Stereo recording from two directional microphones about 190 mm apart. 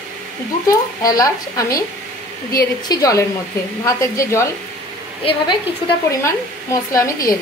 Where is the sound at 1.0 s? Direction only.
20° left (ahead or behind).